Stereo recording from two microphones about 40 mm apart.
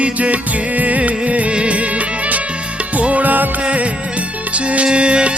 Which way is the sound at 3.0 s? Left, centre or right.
Right.